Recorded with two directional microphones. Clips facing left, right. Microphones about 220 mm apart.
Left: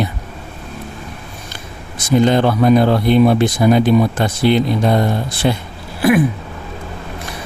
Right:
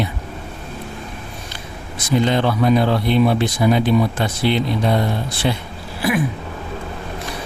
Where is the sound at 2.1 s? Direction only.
45° left (ahead or behind).